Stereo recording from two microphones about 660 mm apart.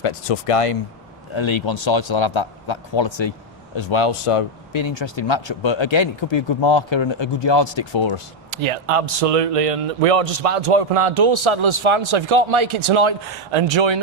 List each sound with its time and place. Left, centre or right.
0.0 s speech: left
8.6 s a man's voice: right